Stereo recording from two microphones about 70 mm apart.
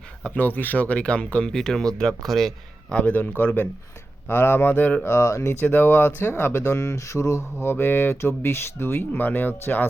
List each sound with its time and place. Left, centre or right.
0.2 s speech: left; by 2.5 s centre
2.9 s speech: centre
5.0 s speech: left
5.6 s speech: left
6.6 s speech: left